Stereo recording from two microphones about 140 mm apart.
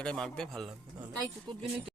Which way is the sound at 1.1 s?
30° right (ahead or behind).